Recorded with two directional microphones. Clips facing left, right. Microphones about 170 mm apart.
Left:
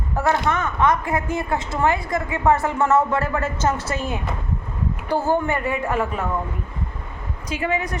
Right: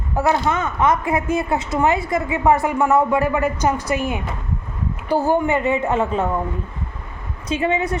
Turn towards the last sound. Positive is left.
turn(degrees=-25)  # may be behind; listen again after turning